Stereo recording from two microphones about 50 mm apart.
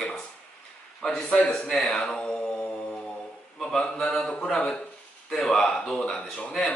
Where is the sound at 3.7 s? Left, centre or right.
Centre.